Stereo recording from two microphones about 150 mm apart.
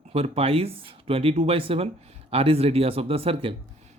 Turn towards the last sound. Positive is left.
turn(degrees=-40)  # may be behind; listen again after turning